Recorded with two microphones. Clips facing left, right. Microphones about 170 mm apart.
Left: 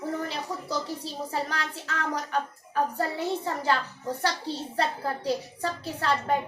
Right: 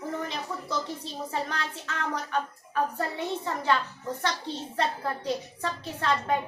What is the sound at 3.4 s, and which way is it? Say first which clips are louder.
A woman's voice: even; 35° left (ahead or behind).